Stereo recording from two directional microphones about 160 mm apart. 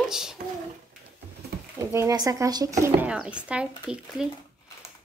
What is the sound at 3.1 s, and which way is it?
Speech, 5° right (ahead or behind).